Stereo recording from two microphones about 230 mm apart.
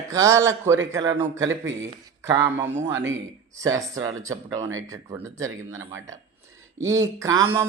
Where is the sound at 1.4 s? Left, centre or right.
Right.